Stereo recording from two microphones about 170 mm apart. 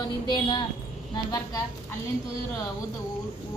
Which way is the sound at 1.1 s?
20° left (ahead or behind).